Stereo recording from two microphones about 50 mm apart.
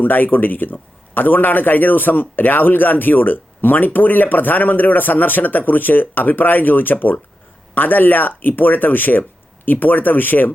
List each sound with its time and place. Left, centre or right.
0.0 s a man's voice: left